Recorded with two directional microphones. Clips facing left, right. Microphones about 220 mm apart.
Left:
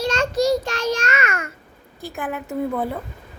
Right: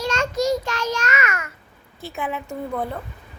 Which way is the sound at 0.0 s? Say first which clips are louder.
Left 2 dB; 30° left (ahead or behind).